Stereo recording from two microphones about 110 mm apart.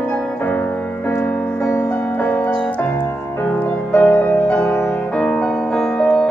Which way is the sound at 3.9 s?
20° left (ahead or behind).